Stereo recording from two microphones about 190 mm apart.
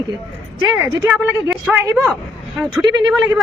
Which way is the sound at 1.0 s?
10° right (ahead or behind).